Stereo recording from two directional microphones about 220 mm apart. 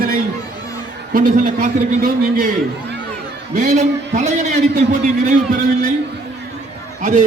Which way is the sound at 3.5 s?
35° right (ahead or behind).